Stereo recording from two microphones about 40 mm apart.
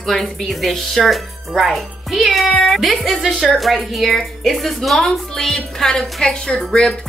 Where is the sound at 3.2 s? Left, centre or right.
Centre.